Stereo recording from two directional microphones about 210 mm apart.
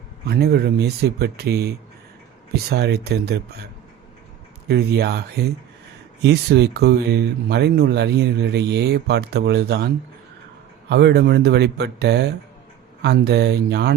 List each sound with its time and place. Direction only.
0.3 s speech: 50° right (ahead or behind)
4.7 s speech: 50° right (ahead or behind)